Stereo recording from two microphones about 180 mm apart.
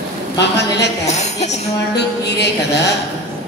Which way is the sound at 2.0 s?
70° left (ahead or behind).